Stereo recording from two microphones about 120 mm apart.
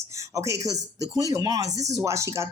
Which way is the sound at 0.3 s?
25° right (ahead or behind).